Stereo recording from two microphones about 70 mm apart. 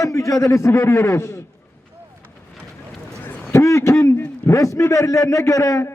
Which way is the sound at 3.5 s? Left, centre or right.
Left.